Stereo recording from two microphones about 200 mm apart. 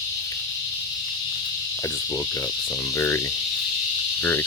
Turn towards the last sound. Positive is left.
turn(degrees=10)  # may be behind; listen again after turning